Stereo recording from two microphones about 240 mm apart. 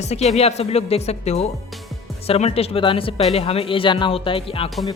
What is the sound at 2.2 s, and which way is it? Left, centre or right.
Speech, left.